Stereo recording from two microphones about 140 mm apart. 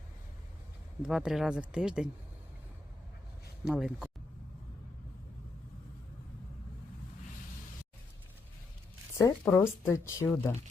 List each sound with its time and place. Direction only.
1.0 s speech: 5° right (ahead or behind)
3.7 s speech: 5° right (ahead or behind)
9.1 s speech: 20° left (ahead or behind)